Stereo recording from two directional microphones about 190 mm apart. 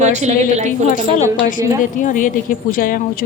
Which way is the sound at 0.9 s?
45° left (ahead or behind).